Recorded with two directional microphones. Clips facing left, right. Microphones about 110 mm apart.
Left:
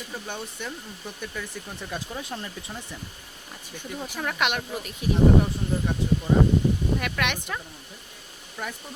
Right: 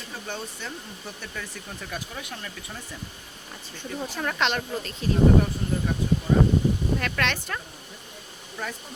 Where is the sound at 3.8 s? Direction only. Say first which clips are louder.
Right 2 dB; 10° left (ahead or behind).